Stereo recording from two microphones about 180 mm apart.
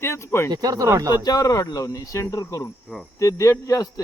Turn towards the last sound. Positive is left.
turn(degrees=20)  # may be behind; listen again after turning